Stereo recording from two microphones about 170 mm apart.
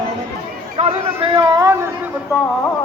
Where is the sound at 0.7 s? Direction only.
30° right (ahead or behind).